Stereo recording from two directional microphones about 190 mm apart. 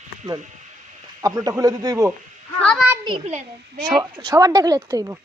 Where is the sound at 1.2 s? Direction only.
20° right (ahead or behind).